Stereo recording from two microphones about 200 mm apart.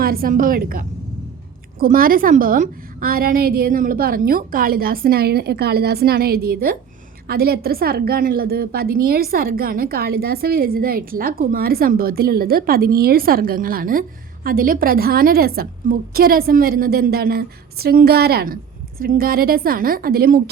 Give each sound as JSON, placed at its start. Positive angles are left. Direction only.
{"t": 0.0, "sound": "a woman's voice", "side_deg": -45}